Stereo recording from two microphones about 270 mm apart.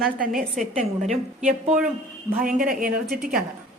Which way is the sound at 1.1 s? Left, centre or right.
Right.